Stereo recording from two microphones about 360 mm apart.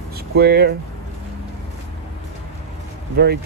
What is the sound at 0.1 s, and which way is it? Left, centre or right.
Speech, right.